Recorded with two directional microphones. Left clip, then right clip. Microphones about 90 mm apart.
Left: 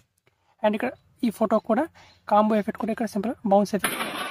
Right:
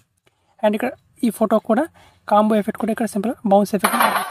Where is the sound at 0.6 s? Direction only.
35° right (ahead or behind).